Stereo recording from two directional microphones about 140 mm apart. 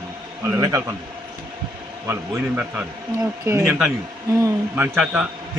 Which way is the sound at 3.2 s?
20° right (ahead or behind).